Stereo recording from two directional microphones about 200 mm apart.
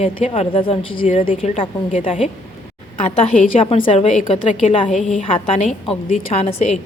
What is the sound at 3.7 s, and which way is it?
A woman's voice, 30° left (ahead or behind).